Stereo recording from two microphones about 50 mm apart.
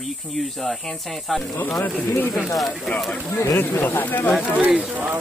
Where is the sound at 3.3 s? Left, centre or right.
Left.